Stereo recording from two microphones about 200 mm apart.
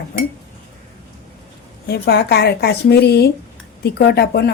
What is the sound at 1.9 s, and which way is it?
Speech, 55° left (ahead or behind).